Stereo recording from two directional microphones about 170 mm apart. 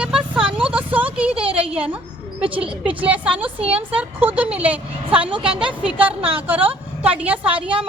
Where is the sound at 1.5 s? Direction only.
35° right (ahead or behind).